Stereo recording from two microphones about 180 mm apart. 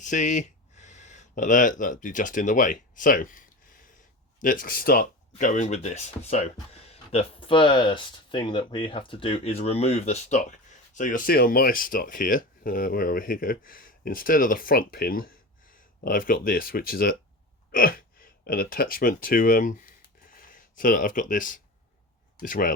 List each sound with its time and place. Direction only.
0.0 s speech: 45° left (ahead or behind)